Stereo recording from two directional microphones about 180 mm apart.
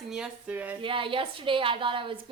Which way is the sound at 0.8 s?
30° right (ahead or behind).